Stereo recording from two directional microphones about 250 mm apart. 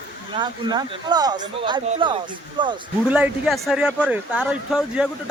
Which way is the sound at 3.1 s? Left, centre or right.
Centre.